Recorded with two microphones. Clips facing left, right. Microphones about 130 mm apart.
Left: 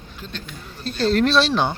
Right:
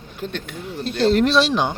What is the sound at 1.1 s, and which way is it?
Speech, 15° right (ahead or behind).